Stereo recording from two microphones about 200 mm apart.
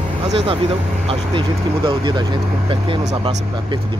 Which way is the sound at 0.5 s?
25° right (ahead or behind).